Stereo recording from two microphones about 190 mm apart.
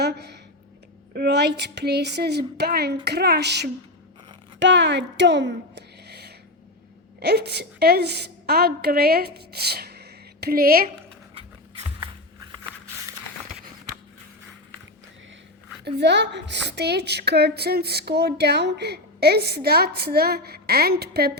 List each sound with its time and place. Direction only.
0.0 s a woman's voice: 60° right (ahead or behind)
11.3 s a sound: 30° right (ahead or behind)
16.0 s a woman's voice: 65° right (ahead or behind)